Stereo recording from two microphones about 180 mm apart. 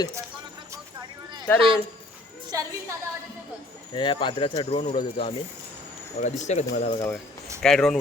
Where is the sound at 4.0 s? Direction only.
25° left (ahead or behind); by 6.9 s 45° left (ahead or behind).